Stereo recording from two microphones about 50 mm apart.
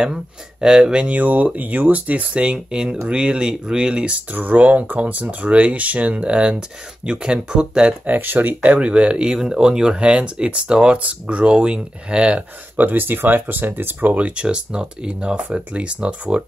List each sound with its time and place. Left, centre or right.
0.0 s speech: centre
4.3 s speech: right; by 7.9 s centre
8.1 s speech: right
8.7 s speech: right
14.1 s speech: right